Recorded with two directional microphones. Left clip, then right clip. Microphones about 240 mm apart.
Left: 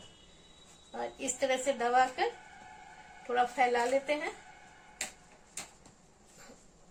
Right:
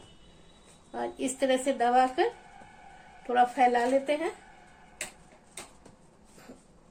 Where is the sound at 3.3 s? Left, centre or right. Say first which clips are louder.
Right 5 dB; right.